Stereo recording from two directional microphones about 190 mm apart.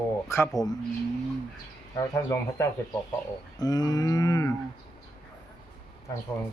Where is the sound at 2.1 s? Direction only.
15° left (ahead or behind).